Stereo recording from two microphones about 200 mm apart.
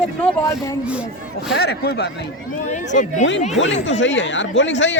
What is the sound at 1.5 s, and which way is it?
Speech, 55° left (ahead or behind).